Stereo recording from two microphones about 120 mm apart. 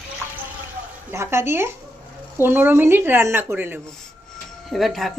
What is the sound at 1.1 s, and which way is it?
A woman's voice, 20° right (ahead or behind).